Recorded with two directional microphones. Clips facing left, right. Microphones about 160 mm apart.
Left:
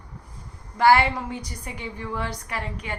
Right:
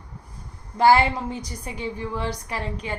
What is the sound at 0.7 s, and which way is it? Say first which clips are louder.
A woman's voice: right 1 dB; 25° right (ahead or behind).